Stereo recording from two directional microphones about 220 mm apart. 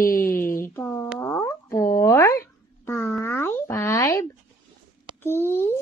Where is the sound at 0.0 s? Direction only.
40° left (ahead or behind).